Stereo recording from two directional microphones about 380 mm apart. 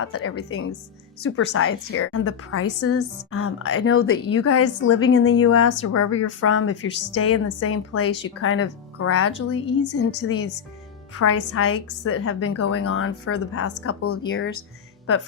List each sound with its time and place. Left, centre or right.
0.0 s a woman's voice: left